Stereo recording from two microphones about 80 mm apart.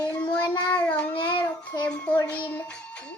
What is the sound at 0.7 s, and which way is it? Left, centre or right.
Speech, centre.